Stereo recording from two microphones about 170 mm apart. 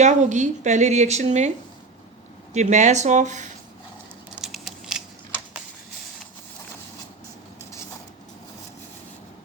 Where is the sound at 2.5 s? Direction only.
45° right (ahead or behind).